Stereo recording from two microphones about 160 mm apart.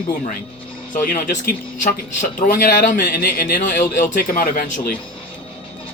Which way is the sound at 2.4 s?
60° left (ahead or behind).